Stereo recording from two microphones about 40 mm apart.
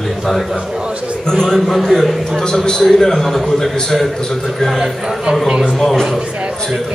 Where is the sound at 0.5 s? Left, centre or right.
Centre.